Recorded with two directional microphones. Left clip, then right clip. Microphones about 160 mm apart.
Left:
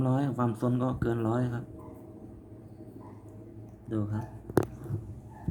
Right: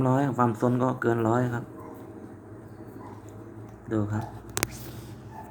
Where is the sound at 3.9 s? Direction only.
30° left (ahead or behind).